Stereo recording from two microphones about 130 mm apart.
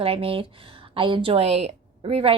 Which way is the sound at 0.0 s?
45° right (ahead or behind).